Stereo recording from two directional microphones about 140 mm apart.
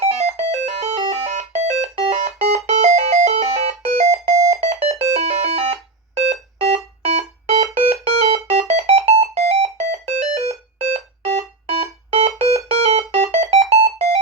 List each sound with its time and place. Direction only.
0.0 s music: 50° right (ahead or behind)
10.5 s alarm: 50° right (ahead or behind)
11.3 s fire alarm: 45° right (ahead or behind)
12.4 s music: 50° right (ahead or behind)